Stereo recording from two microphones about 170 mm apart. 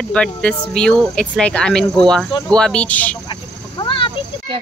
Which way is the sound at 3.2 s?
30° left (ahead or behind).